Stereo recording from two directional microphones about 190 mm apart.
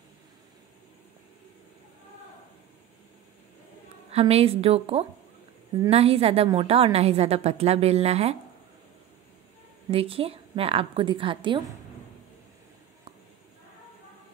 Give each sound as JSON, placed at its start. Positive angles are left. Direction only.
{"t": 4.1, "sound": "a woman's voice", "side_deg": -30}
{"t": 9.8, "sound": "a woman's voice", "side_deg": -30}